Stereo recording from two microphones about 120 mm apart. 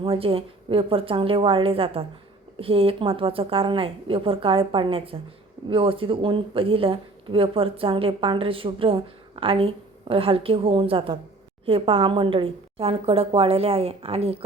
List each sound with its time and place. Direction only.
0.0 s speech: 50° right (ahead or behind)